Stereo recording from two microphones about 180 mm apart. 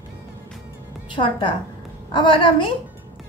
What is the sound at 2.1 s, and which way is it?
Speech, 30° left (ahead or behind).